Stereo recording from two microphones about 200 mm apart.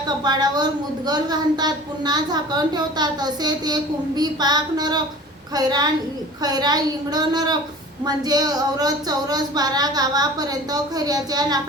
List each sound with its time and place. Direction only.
0.3 s a woman's voice: 20° right (ahead or behind)